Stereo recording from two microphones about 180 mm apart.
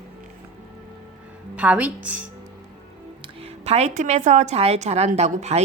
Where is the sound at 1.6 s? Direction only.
10° right (ahead or behind).